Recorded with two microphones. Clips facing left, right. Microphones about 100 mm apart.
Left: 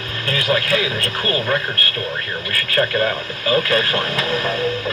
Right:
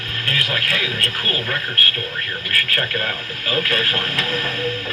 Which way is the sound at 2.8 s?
20° left (ahead or behind).